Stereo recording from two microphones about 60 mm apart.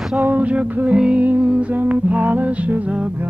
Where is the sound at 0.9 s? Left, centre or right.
Centre.